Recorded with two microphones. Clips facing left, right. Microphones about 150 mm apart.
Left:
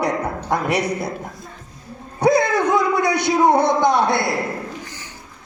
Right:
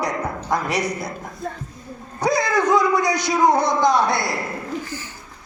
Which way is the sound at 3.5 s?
60° left (ahead or behind).